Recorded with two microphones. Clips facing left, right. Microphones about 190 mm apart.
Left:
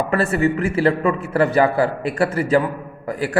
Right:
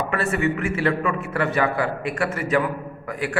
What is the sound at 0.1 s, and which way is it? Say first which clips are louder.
A man's voice: left 4 dB; 35° left (ahead or behind).